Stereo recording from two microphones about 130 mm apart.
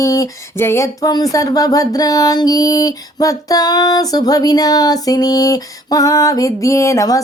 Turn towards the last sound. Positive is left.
turn(degrees=25)  # may be behind; listen again after turning